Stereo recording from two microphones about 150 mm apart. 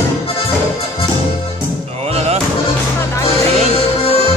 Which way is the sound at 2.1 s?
45° right (ahead or behind).